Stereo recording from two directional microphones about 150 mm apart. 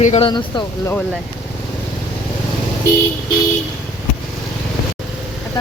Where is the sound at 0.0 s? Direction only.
45° left (ahead or behind).